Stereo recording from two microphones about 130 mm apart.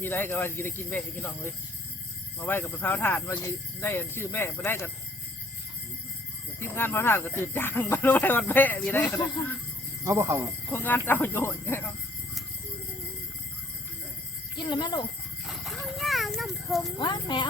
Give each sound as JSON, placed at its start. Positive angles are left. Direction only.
{"t": 0.0, "sound": "speech", "side_deg": 15}
{"t": 6.6, "sound": "speech", "side_deg": 15}
{"t": 10.0, "sound": "speech", "side_deg": -25}
{"t": 10.7, "sound": "speech", "side_deg": 15}
{"t": 14.6, "sound": "speech", "side_deg": 35}
{"t": 15.4, "sound": "horse", "side_deg": 0}
{"t": 17.0, "sound": "speech", "side_deg": 35}